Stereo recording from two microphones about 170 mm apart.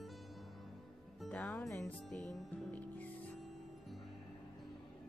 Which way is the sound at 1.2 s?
5° left (ahead or behind).